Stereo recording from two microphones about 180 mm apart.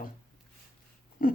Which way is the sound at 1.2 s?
50° left (ahead or behind).